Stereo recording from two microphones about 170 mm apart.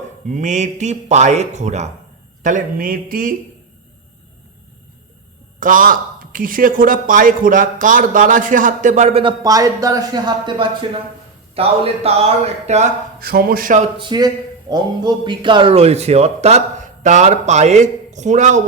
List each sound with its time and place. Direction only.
0.3 s a man's voice: 45° right (ahead or behind)
5.5 s a man's voice: 55° right (ahead or behind)
9.2 s a man's voice: 20° right (ahead or behind); by 12.9 s 40° right (ahead or behind)
13.1 s speech: 60° right (ahead or behind)
14.0 s a man's voice: 25° right (ahead or behind); by 18.6 s 45° right (ahead or behind)